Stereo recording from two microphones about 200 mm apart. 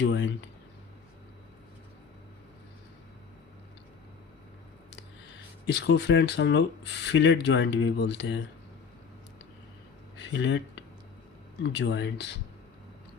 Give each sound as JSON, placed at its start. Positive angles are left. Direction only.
{"t": 0.0, "sound": "speech", "side_deg": 65}
{"t": 5.6, "sound": "speech", "side_deg": 55}
{"t": 10.2, "sound": "a sound", "side_deg": 60}
{"t": 11.6, "sound": "speech", "side_deg": 60}